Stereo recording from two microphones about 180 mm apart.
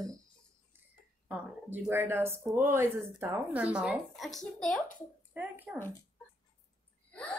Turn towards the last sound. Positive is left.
turn(degrees=5)  # may be behind; listen again after turning